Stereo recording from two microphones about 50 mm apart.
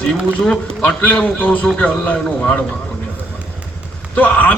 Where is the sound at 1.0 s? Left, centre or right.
Left.